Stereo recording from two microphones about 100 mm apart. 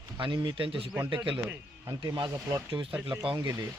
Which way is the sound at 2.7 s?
65° right (ahead or behind).